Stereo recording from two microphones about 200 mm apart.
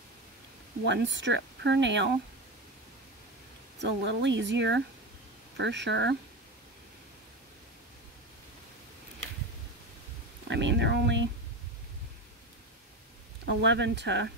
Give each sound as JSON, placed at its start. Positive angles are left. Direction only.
{"t": 0.8, "sound": "speech", "side_deg": -60}
{"t": 3.8, "sound": "speech", "side_deg": -60}
{"t": 10.5, "sound": "a sound", "side_deg": -60}
{"t": 13.5, "sound": "speech", "side_deg": -60}